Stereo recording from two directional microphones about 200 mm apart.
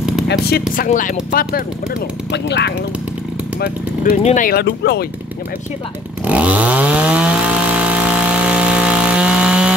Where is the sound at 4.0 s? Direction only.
40° left (ahead or behind).